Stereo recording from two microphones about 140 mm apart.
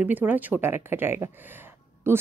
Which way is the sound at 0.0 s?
10° right (ahead or behind).